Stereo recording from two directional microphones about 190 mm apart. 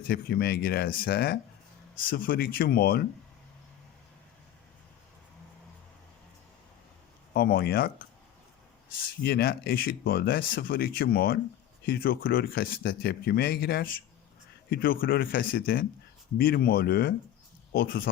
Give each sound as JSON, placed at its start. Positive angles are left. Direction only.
{"t": 0.1, "sound": "speech", "side_deg": 55}
{"t": 7.3, "sound": "speech", "side_deg": 55}
{"t": 9.2, "sound": "speech", "side_deg": 55}